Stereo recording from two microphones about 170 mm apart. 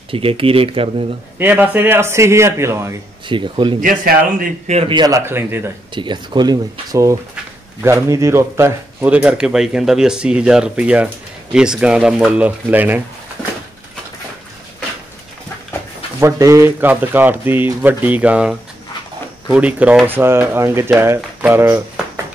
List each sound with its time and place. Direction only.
0.1 s speech: 35° right (ahead or behind)
1.4 s speech: 10° right (ahead or behind)
3.3 s speech: 30° right (ahead or behind)
3.8 s speech: 55° right (ahead or behind)
4.6 s speech: 40° right (ahead or behind)
4.9 s speech: 20° right (ahead or behind)
5.9 s speech: 25° right (ahead or behind); by 13.0 s 10° right (ahead or behind)
16.2 s speech: 15° right (ahead or behind)